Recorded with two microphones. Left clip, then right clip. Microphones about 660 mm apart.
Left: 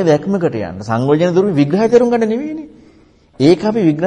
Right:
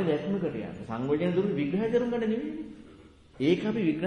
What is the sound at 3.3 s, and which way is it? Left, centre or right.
Speech, left.